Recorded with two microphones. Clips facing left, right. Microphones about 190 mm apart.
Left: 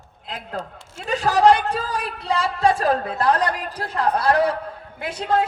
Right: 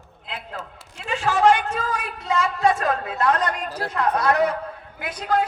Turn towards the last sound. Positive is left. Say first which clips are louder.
# left 2 dB
turn(degrees=25)  # may be behind; listen again after turning